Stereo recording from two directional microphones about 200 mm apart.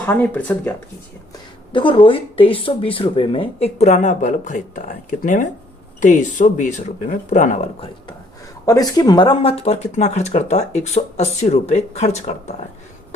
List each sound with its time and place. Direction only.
0.0 s speech: 10° left (ahead or behind)
1.7 s speech: 25° left (ahead or behind)
8.6 s speech: 20° left (ahead or behind); by 12.6 s 35° left (ahead or behind)